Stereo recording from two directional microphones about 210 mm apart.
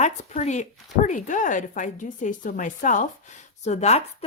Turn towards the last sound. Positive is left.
turn(degrees=30)  # may be behind; listen again after turning